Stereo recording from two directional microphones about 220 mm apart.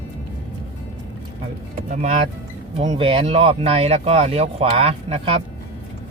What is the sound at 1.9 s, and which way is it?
Speech, 35° right (ahead or behind).